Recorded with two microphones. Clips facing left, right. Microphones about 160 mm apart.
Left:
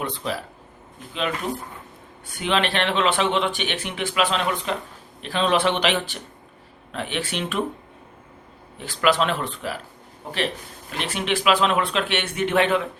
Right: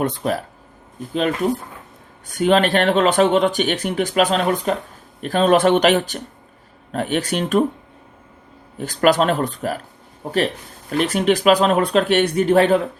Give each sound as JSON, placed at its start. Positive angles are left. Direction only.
{"t": 0.0, "sound": "speech", "side_deg": -50}
{"t": 2.2, "sound": "speech", "side_deg": -45}
{"t": 8.8, "sound": "speech", "side_deg": -45}